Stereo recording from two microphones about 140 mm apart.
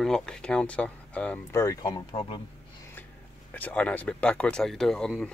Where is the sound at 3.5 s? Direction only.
10° left (ahead or behind).